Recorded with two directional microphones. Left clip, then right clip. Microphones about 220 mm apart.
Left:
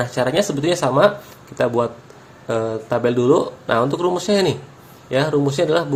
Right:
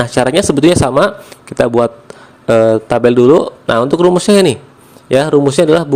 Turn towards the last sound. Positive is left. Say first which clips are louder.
# right 8 dB
turn(degrees=-40)  # may be behind; listen again after turning